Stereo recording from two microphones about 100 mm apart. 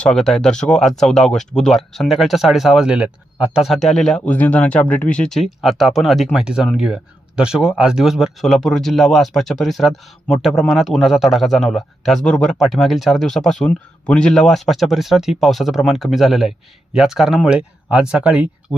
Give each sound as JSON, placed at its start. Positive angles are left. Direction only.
{"t": 0.0, "sound": "speech", "side_deg": 5}
{"t": 3.7, "sound": "speech", "side_deg": 5}
{"t": 4.3, "sound": "speech", "side_deg": 15}
{"t": 18.7, "sound": "speech", "side_deg": 25}